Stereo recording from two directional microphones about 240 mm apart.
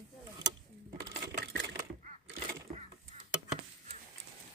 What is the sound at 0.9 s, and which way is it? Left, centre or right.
Coin, right.